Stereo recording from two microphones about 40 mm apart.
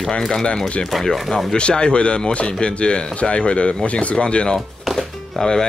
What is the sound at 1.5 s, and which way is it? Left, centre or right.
Speech, left.